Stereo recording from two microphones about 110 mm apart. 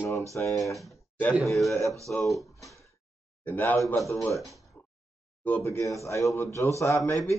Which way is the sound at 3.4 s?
15° left (ahead or behind).